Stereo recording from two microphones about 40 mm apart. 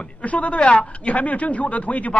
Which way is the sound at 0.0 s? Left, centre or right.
Left.